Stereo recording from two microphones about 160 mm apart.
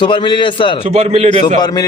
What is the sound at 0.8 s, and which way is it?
Speech, 45° right (ahead or behind).